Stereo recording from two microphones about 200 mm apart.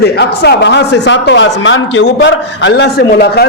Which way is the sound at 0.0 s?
55° left (ahead or behind).